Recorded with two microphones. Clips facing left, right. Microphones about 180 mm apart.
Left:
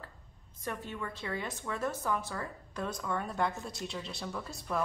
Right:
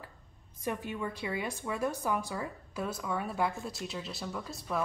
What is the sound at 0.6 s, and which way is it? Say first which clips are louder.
A woman's voice: right 4 dB; 15° right (ahead or behind).